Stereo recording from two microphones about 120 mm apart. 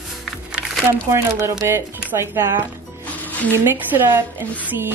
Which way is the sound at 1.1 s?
20° right (ahead or behind).